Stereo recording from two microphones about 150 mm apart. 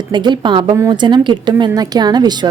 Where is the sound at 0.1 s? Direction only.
30° right (ahead or behind).